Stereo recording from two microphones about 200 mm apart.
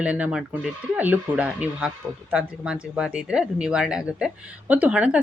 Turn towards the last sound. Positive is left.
turn(degrees=-5)  # may be behind; listen again after turning